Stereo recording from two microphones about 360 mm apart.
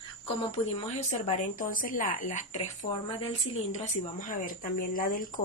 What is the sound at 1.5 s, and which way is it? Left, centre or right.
Speech, left.